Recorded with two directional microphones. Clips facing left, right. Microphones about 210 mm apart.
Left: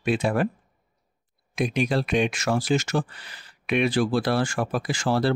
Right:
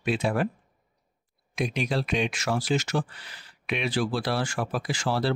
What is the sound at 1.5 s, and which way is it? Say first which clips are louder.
Speech: left 4 dB; 50° left (ahead or behind).